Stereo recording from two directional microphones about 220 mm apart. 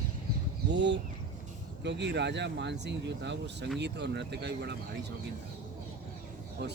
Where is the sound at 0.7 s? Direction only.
50° right (ahead or behind).